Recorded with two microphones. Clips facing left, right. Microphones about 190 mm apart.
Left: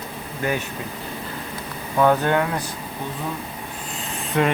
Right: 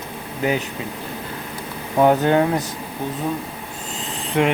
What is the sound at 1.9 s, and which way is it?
Speech, 20° right (ahead or behind).